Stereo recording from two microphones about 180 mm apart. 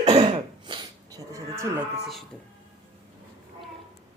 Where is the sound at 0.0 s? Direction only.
35° right (ahead or behind); by 1.7 s 15° right (ahead or behind).